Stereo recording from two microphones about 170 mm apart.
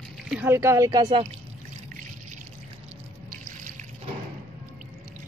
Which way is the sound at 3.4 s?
50° right (ahead or behind).